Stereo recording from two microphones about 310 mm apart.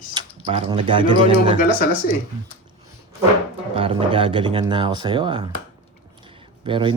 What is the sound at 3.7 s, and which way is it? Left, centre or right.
Speech, centre.